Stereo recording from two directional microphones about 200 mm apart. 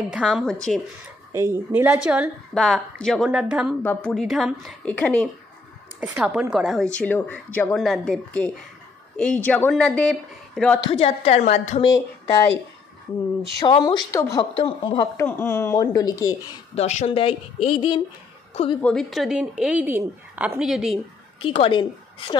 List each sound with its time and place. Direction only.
0.1 s a woman's voice: centre (ahead or behind)
1.3 s a woman's voice: 15° right (ahead or behind)
3.8 s a woman's voice: 5° left (ahead or behind)
5.9 s a woman's voice: 5° right (ahead or behind)
10.8 s a woman's voice: 25° left (ahead or behind)
13.6 s speech: 20° left (ahead or behind)
16.7 s a woman's voice: 35° left (ahead or behind)
18.8 s a woman's voice: 5° left (ahead or behind)
21.4 s a woman's voice: 25° left (ahead or behind)